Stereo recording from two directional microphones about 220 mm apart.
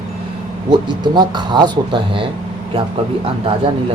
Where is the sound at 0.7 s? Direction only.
20° right (ahead or behind).